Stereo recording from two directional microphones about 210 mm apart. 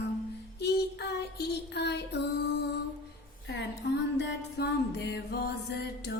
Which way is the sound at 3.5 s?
55° left (ahead or behind).